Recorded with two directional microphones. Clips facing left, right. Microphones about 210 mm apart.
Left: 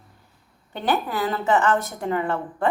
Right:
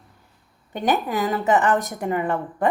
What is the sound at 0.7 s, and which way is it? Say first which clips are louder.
A woman's voice: right 2 dB; 15° right (ahead or behind).